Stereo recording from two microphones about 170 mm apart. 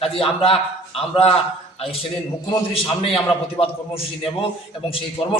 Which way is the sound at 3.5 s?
35° left (ahead or behind).